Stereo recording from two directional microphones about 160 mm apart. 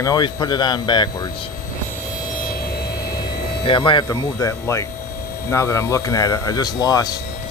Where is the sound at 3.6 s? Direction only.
30° left (ahead or behind).